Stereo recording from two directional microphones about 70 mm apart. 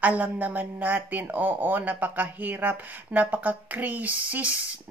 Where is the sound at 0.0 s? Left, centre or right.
Right.